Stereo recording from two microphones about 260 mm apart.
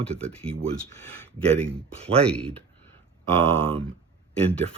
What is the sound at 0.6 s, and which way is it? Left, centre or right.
Speech, right.